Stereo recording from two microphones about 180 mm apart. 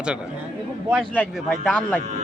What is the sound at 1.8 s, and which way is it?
Speech, 10° left (ahead or behind).